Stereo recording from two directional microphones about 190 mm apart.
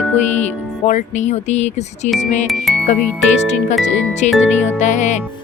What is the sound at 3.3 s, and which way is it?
Speech, 40° left (ahead or behind).